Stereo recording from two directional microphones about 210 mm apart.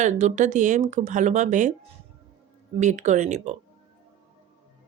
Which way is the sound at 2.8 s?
35° right (ahead or behind).